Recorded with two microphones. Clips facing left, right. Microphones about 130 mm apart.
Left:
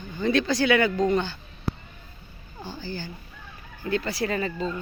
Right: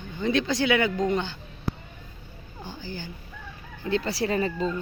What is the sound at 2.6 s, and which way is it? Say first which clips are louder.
Speech: left 3 dB; 15° right (ahead or behind).